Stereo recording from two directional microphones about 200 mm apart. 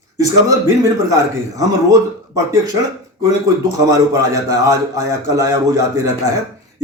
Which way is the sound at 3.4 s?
15° right (ahead or behind).